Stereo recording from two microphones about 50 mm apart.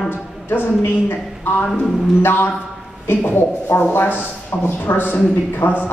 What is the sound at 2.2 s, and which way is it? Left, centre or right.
A woman's voice, left.